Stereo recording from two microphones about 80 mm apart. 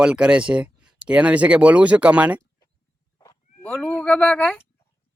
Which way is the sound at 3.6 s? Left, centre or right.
Centre.